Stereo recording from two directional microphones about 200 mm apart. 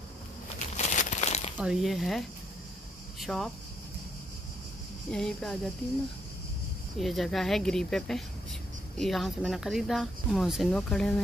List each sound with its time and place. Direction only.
0.7 s crumpling: 35° left (ahead or behind)
1.6 s speech: centre (ahead or behind)
5.1 s speech: 5° left (ahead or behind)
7.0 s speech: centre (ahead or behind)